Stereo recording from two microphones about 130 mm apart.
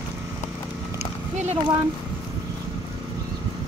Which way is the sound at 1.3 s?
60° right (ahead or behind).